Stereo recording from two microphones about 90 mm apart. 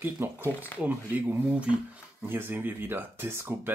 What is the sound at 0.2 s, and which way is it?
Speech, 25° right (ahead or behind).